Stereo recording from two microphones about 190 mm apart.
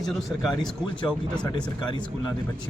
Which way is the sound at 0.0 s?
Centre (ahead or behind).